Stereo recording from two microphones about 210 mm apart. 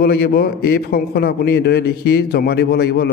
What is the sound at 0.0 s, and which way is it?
Speech, 45° left (ahead or behind).